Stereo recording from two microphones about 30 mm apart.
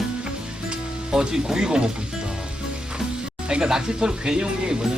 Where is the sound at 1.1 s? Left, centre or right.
Right.